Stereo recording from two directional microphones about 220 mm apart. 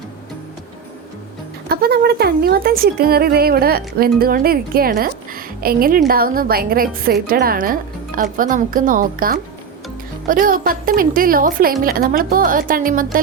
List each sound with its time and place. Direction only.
1.7 s a woman's voice: 45° right (ahead or behind)